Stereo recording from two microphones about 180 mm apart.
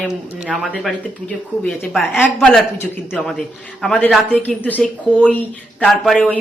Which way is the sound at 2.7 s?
15° left (ahead or behind).